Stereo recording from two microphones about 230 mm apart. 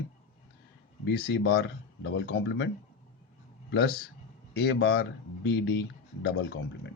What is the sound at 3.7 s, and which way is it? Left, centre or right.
A man's voice, left.